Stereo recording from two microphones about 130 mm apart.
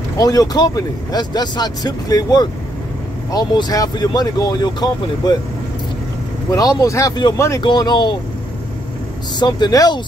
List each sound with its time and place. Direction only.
0.2 s speech: 30° left (ahead or behind)
6.5 s speech: 30° left (ahead or behind)
7.6 s speech: 35° left (ahead or behind)
9.4 s speech: 30° left (ahead or behind)